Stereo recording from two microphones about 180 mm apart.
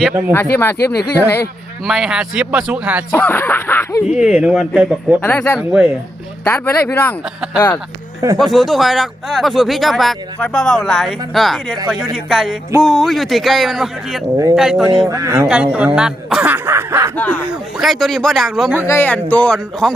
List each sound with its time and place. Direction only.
0.3 s speech: 10° left (ahead or behind)
1.8 s speech: centre (ahead or behind)
3.1 s speech: 10° left (ahead or behind)
4.1 s speech: 5° right (ahead or behind)
5.2 s speech: 10° left (ahead or behind)
6.4 s speech: 15° left (ahead or behind); by 14.8 s 5° right (ahead or behind)
15.1 s speech: 15° right (ahead or behind)
15.4 s speech: 5° right (ahead or behind)
17.2 s speech: 10° left (ahead or behind)
18.9 s speech: 10° left (ahead or behind)